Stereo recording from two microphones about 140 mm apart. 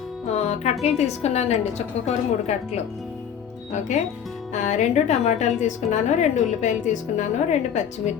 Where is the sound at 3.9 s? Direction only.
60° left (ahead or behind).